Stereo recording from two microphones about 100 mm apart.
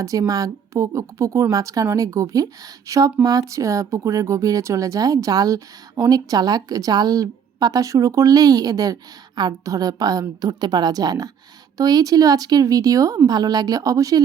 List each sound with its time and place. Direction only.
0.0 s speech: 35° right (ahead or behind)